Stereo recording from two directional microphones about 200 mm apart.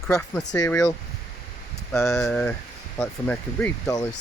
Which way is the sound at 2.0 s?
15° left (ahead or behind).